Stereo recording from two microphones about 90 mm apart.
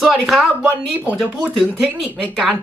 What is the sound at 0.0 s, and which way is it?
Speech, 5° right (ahead or behind).